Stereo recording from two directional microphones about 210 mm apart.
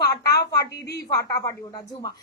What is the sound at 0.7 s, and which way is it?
Speech, 50° left (ahead or behind).